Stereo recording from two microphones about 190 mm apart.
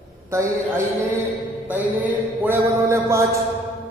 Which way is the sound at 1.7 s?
10° right (ahead or behind).